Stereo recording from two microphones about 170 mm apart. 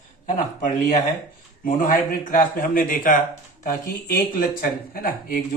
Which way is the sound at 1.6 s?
55° left (ahead or behind).